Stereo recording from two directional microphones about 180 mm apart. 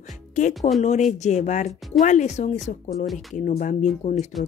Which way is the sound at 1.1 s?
40° left (ahead or behind).